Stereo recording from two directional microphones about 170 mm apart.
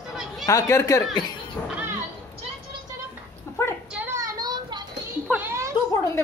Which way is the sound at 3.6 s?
15° left (ahead or behind).